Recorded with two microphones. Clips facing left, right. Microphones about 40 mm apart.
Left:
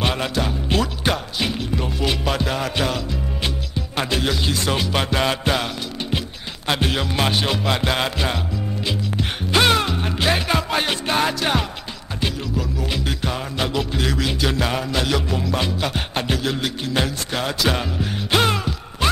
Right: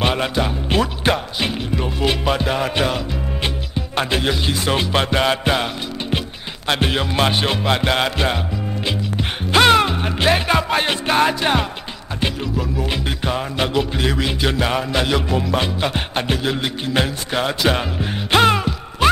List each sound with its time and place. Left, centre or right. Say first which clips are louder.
0.0 s music: right 3 dB; centre
4.1 s music: right 1 dB; centre
9.5 s music: right 4 dB; centre